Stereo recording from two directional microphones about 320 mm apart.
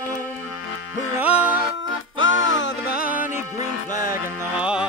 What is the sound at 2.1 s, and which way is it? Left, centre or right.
Music, left.